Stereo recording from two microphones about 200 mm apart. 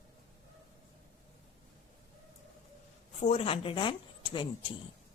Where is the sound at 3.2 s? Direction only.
30° left (ahead or behind).